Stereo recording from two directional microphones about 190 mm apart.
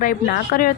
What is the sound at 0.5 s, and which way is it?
Speech, 55° left (ahead or behind).